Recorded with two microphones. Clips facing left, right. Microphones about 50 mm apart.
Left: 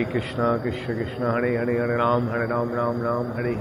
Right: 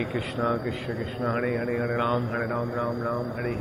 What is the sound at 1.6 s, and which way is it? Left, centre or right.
Mantra, centre.